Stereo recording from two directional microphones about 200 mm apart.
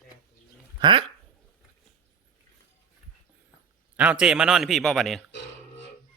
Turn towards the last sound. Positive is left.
turn(degrees=0)  # may be behind; listen again after turning